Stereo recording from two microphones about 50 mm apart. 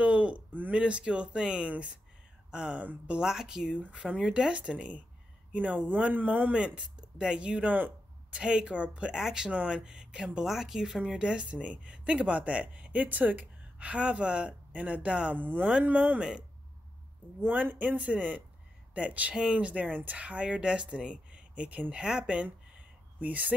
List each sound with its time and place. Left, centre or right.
0.0 s a sound: right
0.6 s speech: right
2.8 s speech: right
3.2 s speech: centre; by 6.5 s right
6.5 s speech: right
15.3 s speech: right
16.2 s speech: centre
17.5 s speech: right; by 22.4 s centre
23.1 s speech: right